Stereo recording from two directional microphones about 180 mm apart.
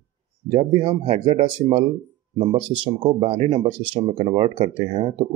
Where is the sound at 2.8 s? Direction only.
30° right (ahead or behind).